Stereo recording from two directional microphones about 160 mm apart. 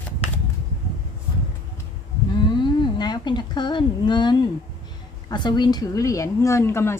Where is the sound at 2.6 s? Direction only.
30° left (ahead or behind).